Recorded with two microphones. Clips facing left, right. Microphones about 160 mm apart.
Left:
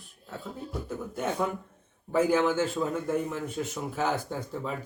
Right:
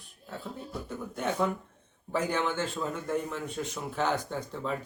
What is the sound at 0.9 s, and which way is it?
Speech, 5° left (ahead or behind).